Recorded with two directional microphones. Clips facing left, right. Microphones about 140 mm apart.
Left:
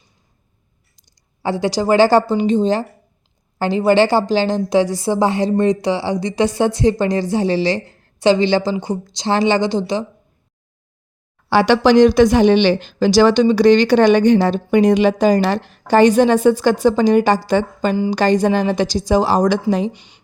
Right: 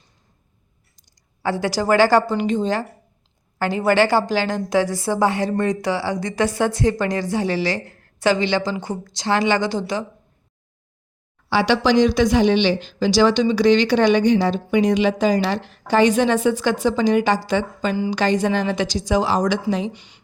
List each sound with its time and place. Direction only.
1.4 s a woman's voice: 25° left (ahead or behind)
8.7 s a woman's voice: 15° left (ahead or behind)
11.4 s a woman's voice: 50° left (ahead or behind)
19.9 s a woman's voice: 20° left (ahead or behind)